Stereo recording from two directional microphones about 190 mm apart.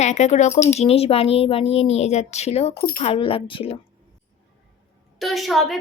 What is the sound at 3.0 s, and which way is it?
Speech, 30° left (ahead or behind).